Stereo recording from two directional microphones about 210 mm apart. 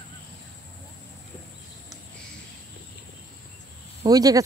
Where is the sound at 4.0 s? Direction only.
15° right (ahead or behind).